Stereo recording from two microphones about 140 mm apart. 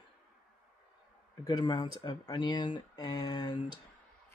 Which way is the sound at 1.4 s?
30° left (ahead or behind).